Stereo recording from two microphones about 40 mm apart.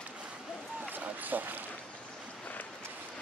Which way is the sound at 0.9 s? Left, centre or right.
Right.